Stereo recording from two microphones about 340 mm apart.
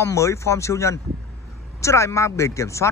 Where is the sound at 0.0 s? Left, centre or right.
Centre.